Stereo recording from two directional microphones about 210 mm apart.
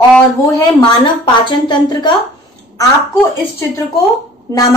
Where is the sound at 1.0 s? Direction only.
20° left (ahead or behind).